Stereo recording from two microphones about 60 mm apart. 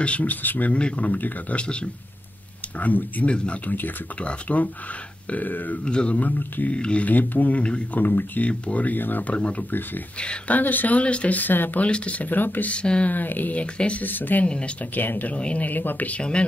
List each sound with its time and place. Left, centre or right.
0.0 s speech: left
3.7 s speech: left
5.9 s speech: centre
8.0 s speech: left
8.5 s speech: left
9.3 s speech: left
11.9 s speech: centre
12.7 s speech: centre
13.1 s speech: left
14.0 s speech: left; by 16.4 s centre